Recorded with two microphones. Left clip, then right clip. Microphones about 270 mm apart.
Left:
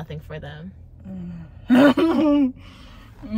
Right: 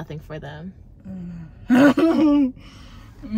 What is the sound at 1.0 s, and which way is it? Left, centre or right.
Gasp, centre.